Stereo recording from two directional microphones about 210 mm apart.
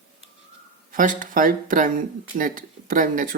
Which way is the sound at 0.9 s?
40° right (ahead or behind).